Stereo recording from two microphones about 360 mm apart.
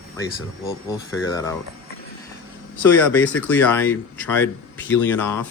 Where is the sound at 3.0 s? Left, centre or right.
Centre.